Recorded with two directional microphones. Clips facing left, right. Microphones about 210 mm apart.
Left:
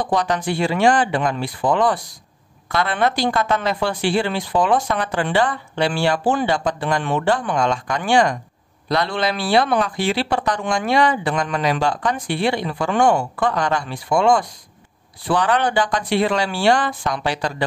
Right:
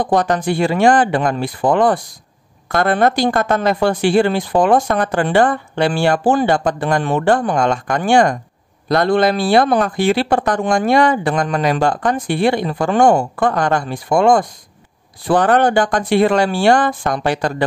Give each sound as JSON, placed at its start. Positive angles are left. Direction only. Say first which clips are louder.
{"t": 0.0, "sound": "speech", "louder": "right 5 dB", "side_deg": -50}